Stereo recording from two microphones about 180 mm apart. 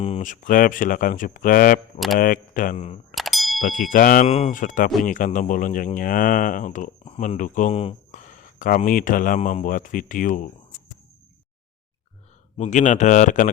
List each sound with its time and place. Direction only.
0.0 s speech: 40° left (ahead or behind)
3.2 s a sound: centre (ahead or behind)
3.6 s speech: 50° left (ahead or behind)
4.3 s speech: 35° left (ahead or behind)
12.5 s speech: 40° left (ahead or behind)